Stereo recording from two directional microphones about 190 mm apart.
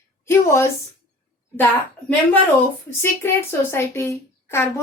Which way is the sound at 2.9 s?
10° left (ahead or behind).